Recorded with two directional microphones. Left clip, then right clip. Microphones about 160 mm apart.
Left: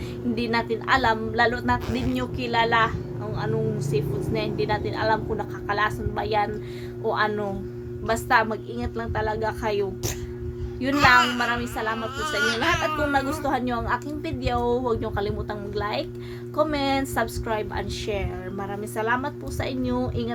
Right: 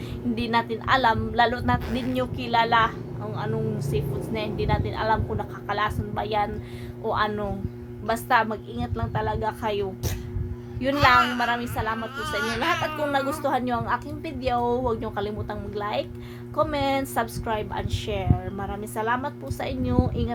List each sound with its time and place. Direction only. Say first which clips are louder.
0.3 s a woman's voice: even; 10° right (ahead or behind)
10.8 s a woman's voice: even; 10° right (ahead or behind)
11.2 s a woman's voice: left 1 dB; 20° left (ahead or behind)
11.4 s a woman's voice: even; 10° right (ahead or behind)
12.4 s a sound: left 2 dB; 20° left (ahead or behind)
13.0 s a woman's voice: left 1 dB; 10° right (ahead or behind)